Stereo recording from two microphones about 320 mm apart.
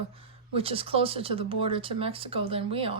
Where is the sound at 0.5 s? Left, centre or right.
Centre.